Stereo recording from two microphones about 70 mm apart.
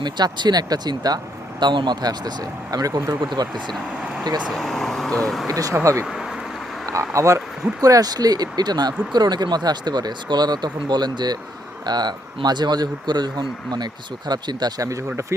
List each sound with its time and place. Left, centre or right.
0.0 s speech: right
4.5 s speech: centre
5.5 s speech: right
6.1 s bee: centre
7.1 s speech: right
7.8 s speech: right
14.8 s speech: right